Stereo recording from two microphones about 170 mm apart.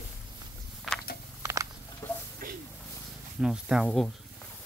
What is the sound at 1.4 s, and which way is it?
Patter, 20° right (ahead or behind).